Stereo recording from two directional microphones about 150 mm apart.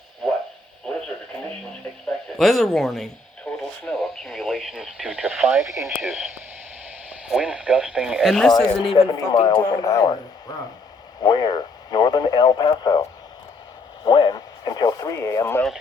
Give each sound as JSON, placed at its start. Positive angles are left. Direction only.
{"t": 1.0, "sound": "radio", "side_deg": 5}
{"t": 7.3, "sound": "speech", "side_deg": -5}
{"t": 8.5, "sound": "speech", "side_deg": 35}
{"t": 9.3, "sound": "speech", "side_deg": 0}
{"t": 9.8, "sound": "speech", "side_deg": 25}
{"t": 11.2, "sound": "speech", "side_deg": 25}